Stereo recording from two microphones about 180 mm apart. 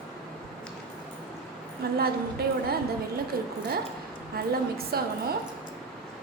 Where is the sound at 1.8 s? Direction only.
60° right (ahead or behind).